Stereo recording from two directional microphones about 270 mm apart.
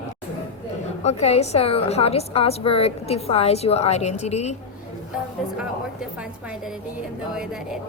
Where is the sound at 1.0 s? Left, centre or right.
Left.